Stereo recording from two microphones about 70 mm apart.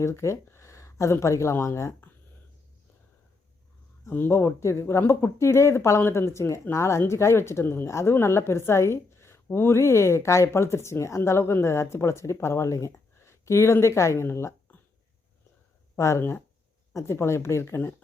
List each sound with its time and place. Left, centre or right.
0.0 s speech: left
4.1 s a woman's voice: left
7.9 s a woman's voice: left
13.2 s a sound: left
13.8 s speech: left
16.0 s a woman's voice: left